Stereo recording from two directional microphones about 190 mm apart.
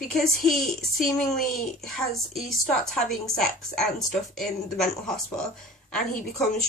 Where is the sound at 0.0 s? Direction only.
Centre (ahead or behind).